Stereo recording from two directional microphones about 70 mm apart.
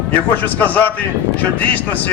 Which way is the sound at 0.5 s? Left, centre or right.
Left.